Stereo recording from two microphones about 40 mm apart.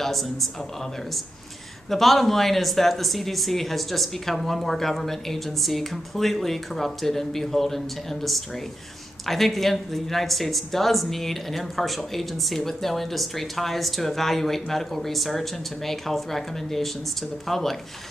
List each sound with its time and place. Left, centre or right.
0.0 s speech: centre
1.9 s speech: centre